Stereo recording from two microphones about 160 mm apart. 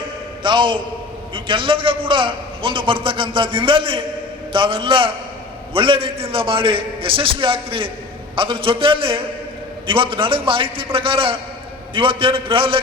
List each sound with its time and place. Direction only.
0.4 s a man's voice: 30° right (ahead or behind)